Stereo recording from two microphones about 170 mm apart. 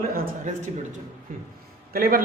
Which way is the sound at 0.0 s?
55° right (ahead or behind).